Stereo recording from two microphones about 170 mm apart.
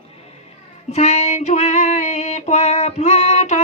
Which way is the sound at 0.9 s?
40° left (ahead or behind).